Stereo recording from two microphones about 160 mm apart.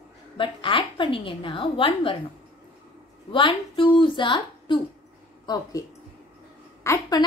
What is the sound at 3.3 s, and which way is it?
A woman's voice, 30° left (ahead or behind).